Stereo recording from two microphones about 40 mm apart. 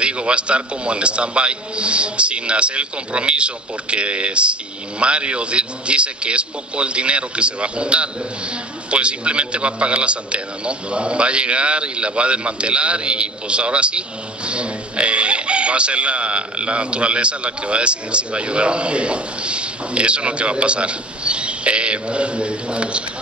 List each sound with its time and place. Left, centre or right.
0.0 s a man's voice: right